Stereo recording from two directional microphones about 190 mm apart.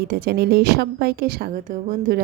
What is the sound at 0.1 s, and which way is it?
A woman's voice, 55° right (ahead or behind).